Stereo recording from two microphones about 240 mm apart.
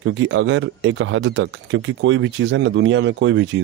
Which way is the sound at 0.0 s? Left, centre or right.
Right.